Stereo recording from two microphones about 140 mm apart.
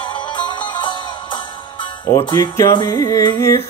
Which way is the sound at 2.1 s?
25° left (ahead or behind).